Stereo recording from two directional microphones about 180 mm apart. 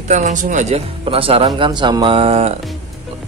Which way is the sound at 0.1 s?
45° right (ahead or behind).